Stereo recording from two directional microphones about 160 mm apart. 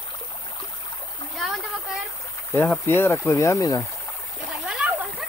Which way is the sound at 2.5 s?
15° left (ahead or behind).